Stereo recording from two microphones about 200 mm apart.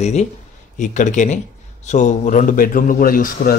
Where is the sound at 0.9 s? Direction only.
40° left (ahead or behind).